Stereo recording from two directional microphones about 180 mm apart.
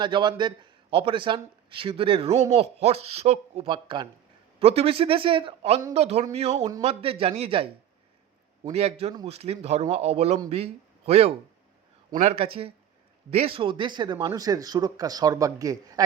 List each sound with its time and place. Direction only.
0.0 s speech: 25° right (ahead or behind)